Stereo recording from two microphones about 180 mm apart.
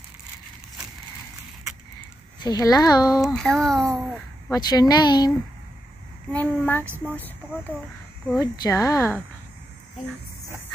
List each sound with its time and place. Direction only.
2.4 s speech: 20° left (ahead or behind)
3.1 s speech: centre (ahead or behind)
4.5 s speech: 20° left (ahead or behind)
6.3 s a woman's voice: 10° left (ahead or behind)
8.4 s speech: 20° left (ahead or behind)